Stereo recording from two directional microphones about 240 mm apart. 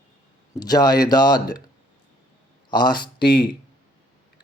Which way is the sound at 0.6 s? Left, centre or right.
Centre.